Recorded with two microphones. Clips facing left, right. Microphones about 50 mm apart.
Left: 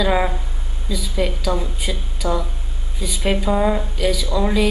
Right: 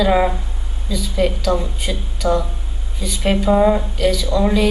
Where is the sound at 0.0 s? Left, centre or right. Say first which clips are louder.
Right 3 dB; centre.